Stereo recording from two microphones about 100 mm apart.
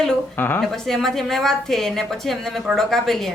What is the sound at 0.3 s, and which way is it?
Speech, 20° left (ahead or behind).